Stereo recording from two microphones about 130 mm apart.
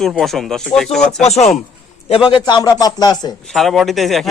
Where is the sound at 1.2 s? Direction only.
55° left (ahead or behind).